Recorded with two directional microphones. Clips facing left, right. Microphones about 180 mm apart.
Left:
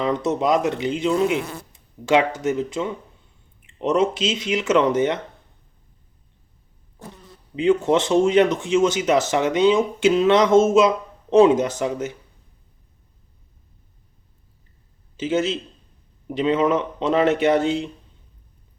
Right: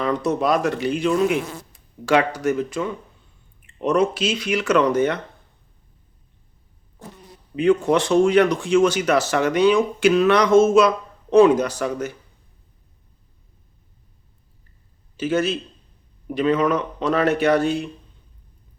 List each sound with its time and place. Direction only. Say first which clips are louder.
0.0 s speech: even; 20° left (ahead or behind)
7.5 s speech: even; 20° left (ahead or behind)
15.1 s speech: right 1 dB; 20° left (ahead or behind)